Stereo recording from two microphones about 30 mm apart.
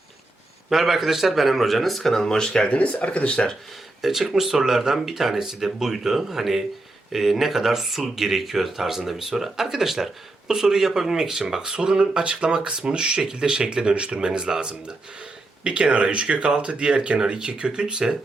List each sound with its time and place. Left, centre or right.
0.7 s speech: centre
2.2 s speech: left
2.6 s speech: left
4.0 s speech: centre; by 14.7 s right
15.6 s speech: right
17.2 s speech: right